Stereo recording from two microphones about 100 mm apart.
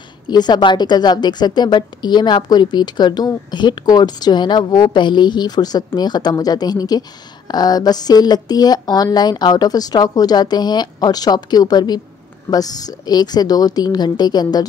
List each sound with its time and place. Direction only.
0.3 s a woman's voice: 45° left (ahead or behind)